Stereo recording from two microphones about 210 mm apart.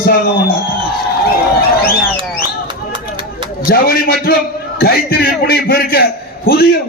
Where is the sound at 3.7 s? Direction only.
45° left (ahead or behind).